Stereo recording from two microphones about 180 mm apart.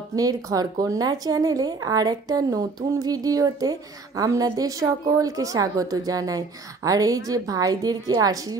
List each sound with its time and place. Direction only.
0.1 s speech: 20° right (ahead or behind)